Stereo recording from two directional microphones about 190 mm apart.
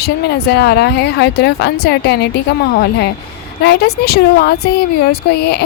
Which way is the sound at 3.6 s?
60° left (ahead or behind).